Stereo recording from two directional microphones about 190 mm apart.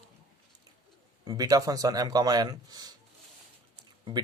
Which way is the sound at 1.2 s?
20° right (ahead or behind).